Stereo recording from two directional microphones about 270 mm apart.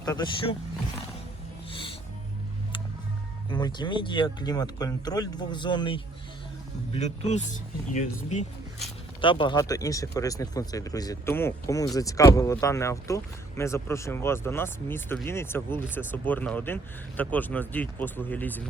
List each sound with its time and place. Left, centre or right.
0.0 s speech: centre
1.7 s music: centre
3.5 s speech: centre